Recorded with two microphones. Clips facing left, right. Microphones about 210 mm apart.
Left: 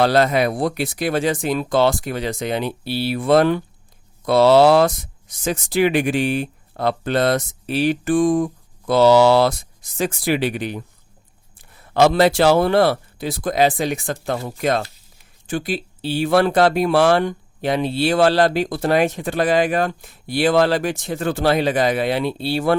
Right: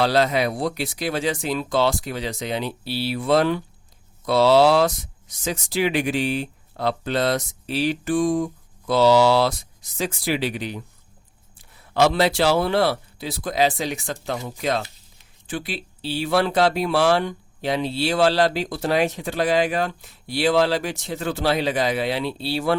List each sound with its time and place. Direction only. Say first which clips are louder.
0.0 s speech: left 3 dB; 55° left (ahead or behind)